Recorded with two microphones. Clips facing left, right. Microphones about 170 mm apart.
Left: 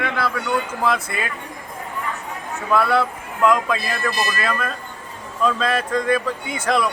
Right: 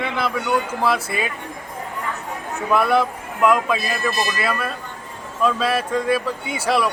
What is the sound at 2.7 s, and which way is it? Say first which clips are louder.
Speech: right 1 dB; 15° right (ahead or behind).